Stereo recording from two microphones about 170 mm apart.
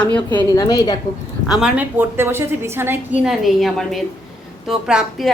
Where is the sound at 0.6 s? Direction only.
20° left (ahead or behind).